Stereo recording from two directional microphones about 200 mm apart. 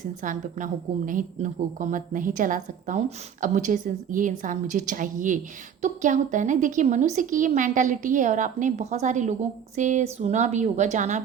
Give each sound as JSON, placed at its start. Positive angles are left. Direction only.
{"t": 0.0, "sound": "a woman's voice", "side_deg": -40}